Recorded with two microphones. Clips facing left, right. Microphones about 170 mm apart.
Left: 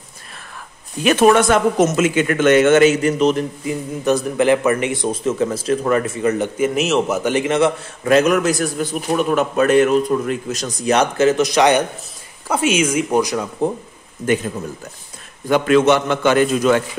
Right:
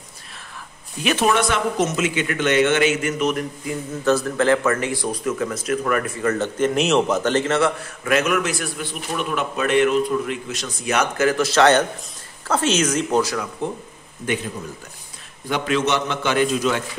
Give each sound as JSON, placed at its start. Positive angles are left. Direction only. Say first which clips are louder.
{"t": 1.0, "sound": "speech", "louder": "left 7 dB", "side_deg": 50}
{"t": 4.0, "sound": "speech", "louder": "left 2 dB", "side_deg": 15}
{"t": 8.0, "sound": "a man's voice", "louder": "left 6 dB", "side_deg": 35}
{"t": 13.6, "sound": "a man's voice", "louder": "left 8 dB", "side_deg": 35}
{"t": 15.4, "sound": "speech", "louder": "left 8 dB", "side_deg": 50}